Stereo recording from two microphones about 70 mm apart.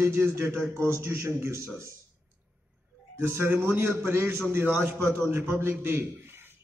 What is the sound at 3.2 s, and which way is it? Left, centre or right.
A man's voice, right.